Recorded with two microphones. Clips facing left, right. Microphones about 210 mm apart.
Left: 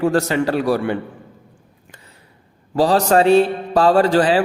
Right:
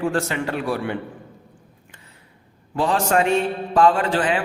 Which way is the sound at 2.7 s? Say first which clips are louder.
Left 5 dB; 35° left (ahead or behind).